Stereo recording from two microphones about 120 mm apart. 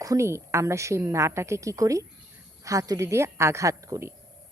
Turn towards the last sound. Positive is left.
turn(degrees=-25)  # may be behind; listen again after turning